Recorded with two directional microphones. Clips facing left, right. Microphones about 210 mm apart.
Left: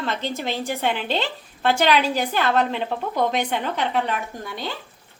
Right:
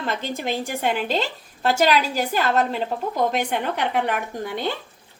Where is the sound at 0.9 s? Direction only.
40° right (ahead or behind).